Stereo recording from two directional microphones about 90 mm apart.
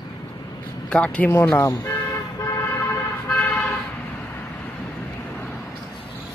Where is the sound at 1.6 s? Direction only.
30° left (ahead or behind).